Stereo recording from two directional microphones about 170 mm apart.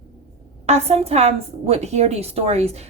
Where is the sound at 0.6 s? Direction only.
40° right (ahead or behind).